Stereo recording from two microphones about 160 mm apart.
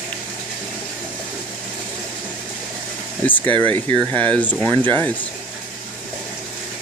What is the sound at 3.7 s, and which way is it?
Speech, 10° left (ahead or behind).